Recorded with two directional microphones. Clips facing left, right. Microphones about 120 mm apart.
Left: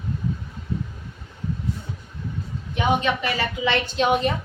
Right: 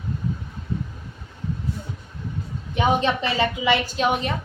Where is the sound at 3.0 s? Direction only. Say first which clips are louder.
Right 2 dB; 30° right (ahead or behind).